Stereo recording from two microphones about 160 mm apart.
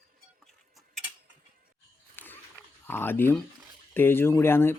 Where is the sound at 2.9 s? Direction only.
15° left (ahead or behind).